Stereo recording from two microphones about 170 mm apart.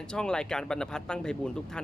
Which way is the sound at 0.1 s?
5° left (ahead or behind).